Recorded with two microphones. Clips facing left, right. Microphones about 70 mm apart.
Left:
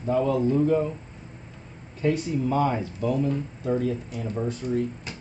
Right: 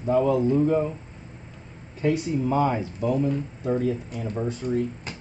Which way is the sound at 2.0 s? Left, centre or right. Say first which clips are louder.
Right 1 dB; centre.